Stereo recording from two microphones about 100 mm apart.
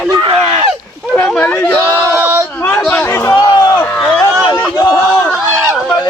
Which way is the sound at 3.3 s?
40° left (ahead or behind).